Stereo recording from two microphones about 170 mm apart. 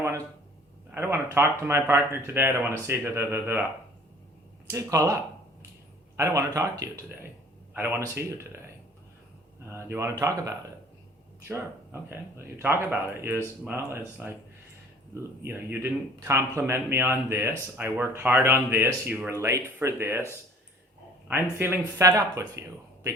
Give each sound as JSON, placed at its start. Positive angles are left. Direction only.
{"t": 0.9, "sound": "speech", "side_deg": -15}
{"t": 4.7, "sound": "speech", "side_deg": -15}
{"t": 9.6, "sound": "speech", "side_deg": -15}
{"t": 21.6, "sound": "speech", "side_deg": -15}